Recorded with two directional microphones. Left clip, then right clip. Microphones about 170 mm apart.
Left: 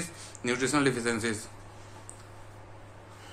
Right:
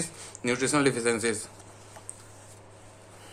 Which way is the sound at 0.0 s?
35° right (ahead or behind).